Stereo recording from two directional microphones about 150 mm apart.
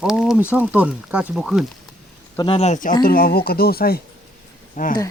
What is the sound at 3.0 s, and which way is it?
Speech, 85° left.